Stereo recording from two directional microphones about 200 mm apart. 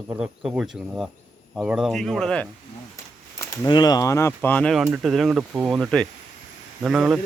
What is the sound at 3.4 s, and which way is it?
Speech, 20° left (ahead or behind).